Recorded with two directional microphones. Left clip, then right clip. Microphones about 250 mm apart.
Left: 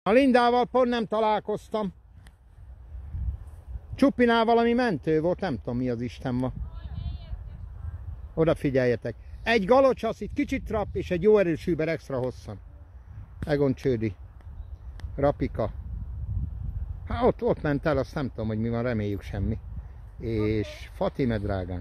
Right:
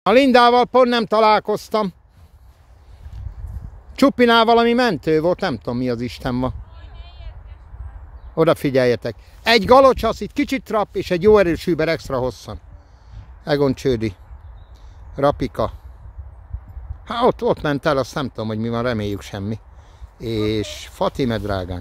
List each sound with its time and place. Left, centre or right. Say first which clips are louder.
0.0 s speech: right 8 dB; centre
3.9 s speech: right 8 dB; centre
6.8 s basketball bounce: right 3 dB; centre
8.4 s speech: right 8 dB; centre
15.1 s speech: right 7 dB; centre
17.0 s speech: right 7 dB; centre